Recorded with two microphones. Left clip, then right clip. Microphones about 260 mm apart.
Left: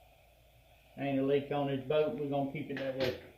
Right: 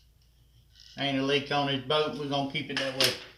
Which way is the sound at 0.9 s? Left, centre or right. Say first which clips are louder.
Right 4 dB; right.